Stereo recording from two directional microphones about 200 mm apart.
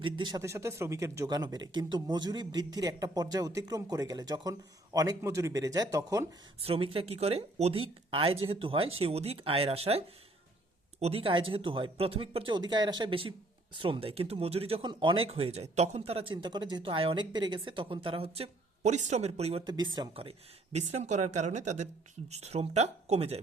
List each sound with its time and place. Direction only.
0.0 s speech: 20° right (ahead or behind)
6.6 s speech: 30° right (ahead or behind)
11.0 s speech: 30° right (ahead or behind)